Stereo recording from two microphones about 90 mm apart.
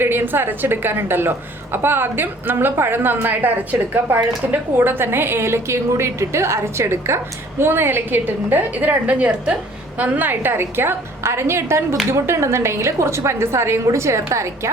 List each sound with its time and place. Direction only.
0.0 s a woman's voice: 25° right (ahead or behind)